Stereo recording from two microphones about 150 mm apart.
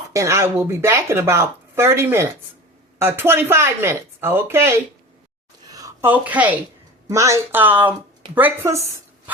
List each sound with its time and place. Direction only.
0.1 s speech: 20° right (ahead or behind)
5.7 s a sound: 20° right (ahead or behind)
6.1 s speech: 10° right (ahead or behind)